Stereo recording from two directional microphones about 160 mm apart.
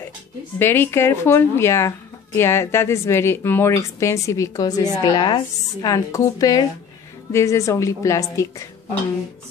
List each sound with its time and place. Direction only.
0.6 s a woman's voice: 15° left (ahead or behind)